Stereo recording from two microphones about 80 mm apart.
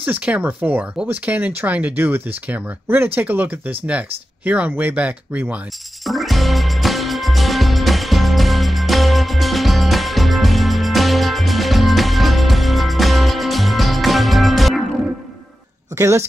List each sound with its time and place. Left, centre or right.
0.0 s speech: centre
6.0 s music: centre
16.0 s a woman's voice: right